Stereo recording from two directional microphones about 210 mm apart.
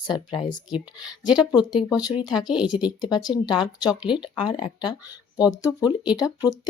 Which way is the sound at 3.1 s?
20° left (ahead or behind).